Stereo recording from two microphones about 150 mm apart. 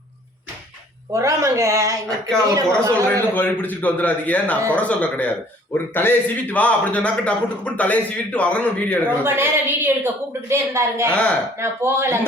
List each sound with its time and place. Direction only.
1.1 s a man's voice: 20° right (ahead or behind)
3.1 s a man's voice: 10° left (ahead or behind)
9.2 s a woman's voice: 15° right (ahead or behind)
11.1 s a man's voice: 5° left (ahead or behind)
11.6 s a woman's voice: 15° right (ahead or behind)